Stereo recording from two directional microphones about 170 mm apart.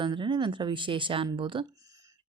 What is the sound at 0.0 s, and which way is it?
Speech, 30° right (ahead or behind).